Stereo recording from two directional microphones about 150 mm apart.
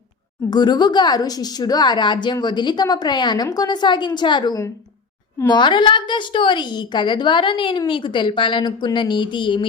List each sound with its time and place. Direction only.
0.5 s a woman's voice: 30° left (ahead or behind)